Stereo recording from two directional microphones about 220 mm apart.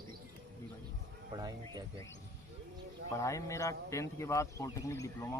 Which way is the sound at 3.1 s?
15° left (ahead or behind).